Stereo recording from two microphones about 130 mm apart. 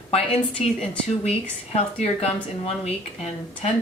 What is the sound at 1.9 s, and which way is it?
A woman's voice, 55° left (ahead or behind).